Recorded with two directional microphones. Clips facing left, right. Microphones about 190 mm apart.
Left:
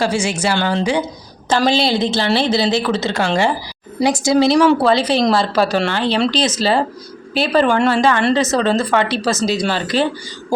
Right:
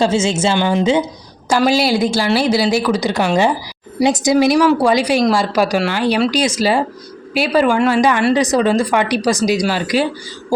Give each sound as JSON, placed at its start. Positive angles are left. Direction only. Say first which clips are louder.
{"t": 0.0, "sound": "a woman's voice", "louder": "right 3 dB", "side_deg": -25}
{"t": 1.5, "sound": "a woman's voice", "louder": "right 1 dB", "side_deg": -10}